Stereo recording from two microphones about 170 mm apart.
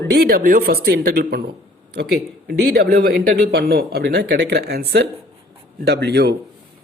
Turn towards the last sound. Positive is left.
turn(degrees=-75)  # may be behind; listen again after turning